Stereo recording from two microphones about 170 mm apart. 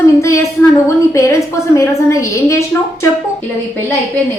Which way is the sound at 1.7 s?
15° left (ahead or behind).